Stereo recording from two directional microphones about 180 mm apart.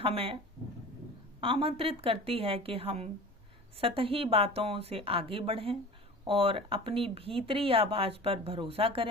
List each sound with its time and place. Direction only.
0.0 s speech: 30° right (ahead or behind)
1.4 s speech: 30° right (ahead or behind)